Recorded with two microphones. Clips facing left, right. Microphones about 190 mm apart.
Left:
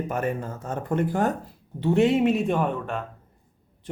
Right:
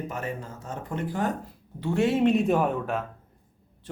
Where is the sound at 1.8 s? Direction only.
20° left (ahead or behind).